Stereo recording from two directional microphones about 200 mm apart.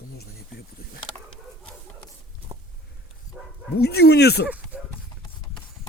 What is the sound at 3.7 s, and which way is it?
Speech, 50° left (ahead or behind).